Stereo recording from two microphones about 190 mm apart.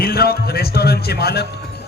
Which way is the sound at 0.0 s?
55° left (ahead or behind).